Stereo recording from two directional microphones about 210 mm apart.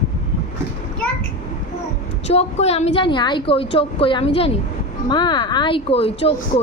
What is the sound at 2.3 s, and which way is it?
Speech, 30° left (ahead or behind).